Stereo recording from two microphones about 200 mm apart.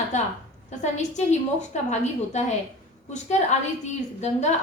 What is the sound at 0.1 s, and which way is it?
A woman's voice, 35° left (ahead or behind).